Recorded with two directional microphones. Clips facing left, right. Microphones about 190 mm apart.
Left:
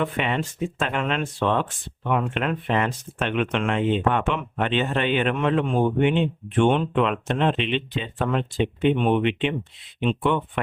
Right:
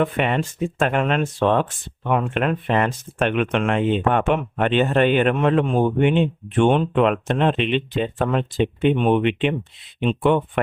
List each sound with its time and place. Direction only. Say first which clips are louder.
0.0 s speech: right 4 dB; 50° right (ahead or behind)